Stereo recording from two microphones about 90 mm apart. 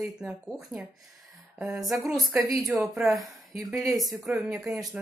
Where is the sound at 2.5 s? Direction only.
5° right (ahead or behind).